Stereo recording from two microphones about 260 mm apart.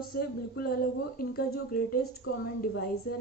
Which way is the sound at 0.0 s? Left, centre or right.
Left.